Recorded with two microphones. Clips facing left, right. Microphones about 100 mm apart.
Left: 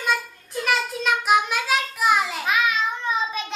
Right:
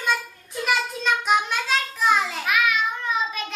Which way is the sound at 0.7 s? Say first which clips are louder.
Left 1 dB; 5° left (ahead or behind).